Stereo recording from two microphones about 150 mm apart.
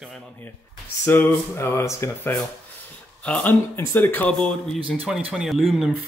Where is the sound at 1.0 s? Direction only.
15° left (ahead or behind).